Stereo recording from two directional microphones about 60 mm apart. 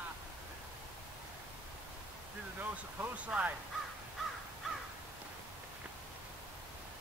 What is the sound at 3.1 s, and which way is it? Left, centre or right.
Fowl, right.